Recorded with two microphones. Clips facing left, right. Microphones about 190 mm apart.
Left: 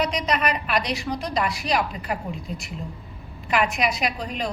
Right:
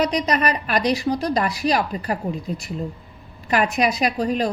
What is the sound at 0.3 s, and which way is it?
A woman's voice, 40° right (ahead or behind).